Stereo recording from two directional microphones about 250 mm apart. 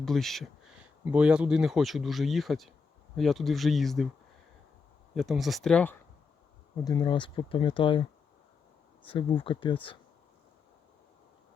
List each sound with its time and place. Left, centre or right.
0.0 s speech: centre
5.1 s speech: centre
6.8 s speech: centre
9.0 s speech: left